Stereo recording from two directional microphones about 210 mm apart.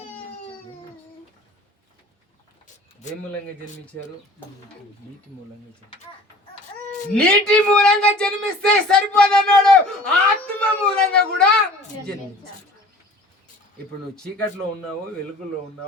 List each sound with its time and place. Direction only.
3.0 s speech: 35° left (ahead or behind)
7.1 s speech: 5° left (ahead or behind)